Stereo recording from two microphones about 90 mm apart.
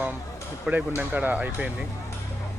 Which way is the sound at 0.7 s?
20° right (ahead or behind).